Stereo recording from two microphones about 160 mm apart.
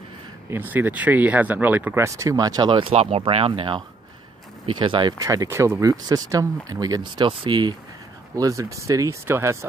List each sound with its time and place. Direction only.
0.5 s speech: 10° right (ahead or behind)